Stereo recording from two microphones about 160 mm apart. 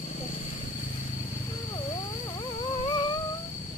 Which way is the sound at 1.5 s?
25° left (ahead or behind).